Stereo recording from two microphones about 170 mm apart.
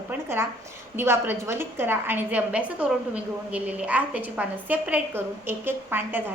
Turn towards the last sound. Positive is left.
turn(degrees=-10)  # may be behind; listen again after turning